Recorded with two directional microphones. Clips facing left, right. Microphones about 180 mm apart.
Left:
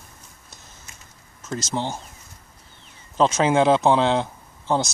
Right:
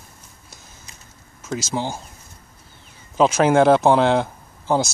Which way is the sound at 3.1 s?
5° right (ahead or behind).